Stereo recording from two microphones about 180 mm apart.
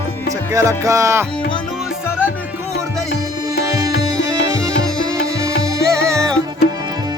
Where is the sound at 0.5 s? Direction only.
15° right (ahead or behind).